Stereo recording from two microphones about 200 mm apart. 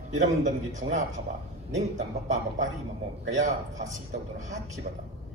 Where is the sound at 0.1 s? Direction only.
35° right (ahead or behind).